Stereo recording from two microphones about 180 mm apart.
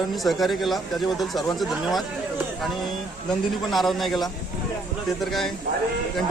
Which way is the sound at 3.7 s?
Centre (ahead or behind).